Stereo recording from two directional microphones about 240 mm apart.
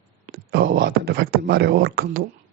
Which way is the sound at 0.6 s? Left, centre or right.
Right.